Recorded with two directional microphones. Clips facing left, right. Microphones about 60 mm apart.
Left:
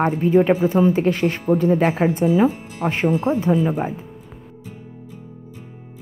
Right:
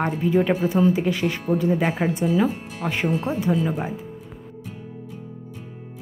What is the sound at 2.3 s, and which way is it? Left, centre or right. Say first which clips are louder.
A woman's voice: left 4 dB; left.